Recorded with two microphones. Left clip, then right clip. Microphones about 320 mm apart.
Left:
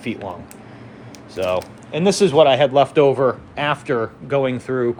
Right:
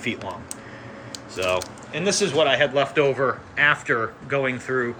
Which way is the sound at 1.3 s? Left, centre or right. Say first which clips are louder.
Left 3 dB; centre.